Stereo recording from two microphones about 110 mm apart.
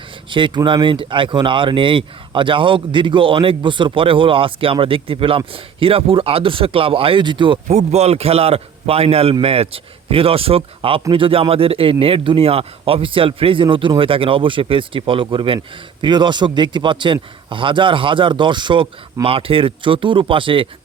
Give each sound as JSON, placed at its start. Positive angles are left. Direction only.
{"t": 0.3, "sound": "speech", "side_deg": -45}
{"t": 7.7, "sound": "a man's voice", "side_deg": -80}